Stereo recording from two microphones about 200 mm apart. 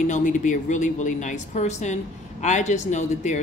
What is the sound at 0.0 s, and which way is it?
Speech, 40° left (ahead or behind).